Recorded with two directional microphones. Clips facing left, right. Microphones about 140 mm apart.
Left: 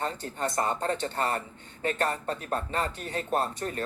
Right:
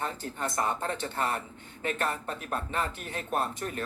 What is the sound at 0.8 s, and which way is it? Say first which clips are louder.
A man's voice: left 3 dB; 40° left (ahead or behind).